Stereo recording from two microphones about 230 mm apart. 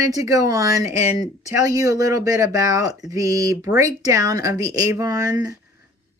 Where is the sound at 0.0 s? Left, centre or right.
Centre.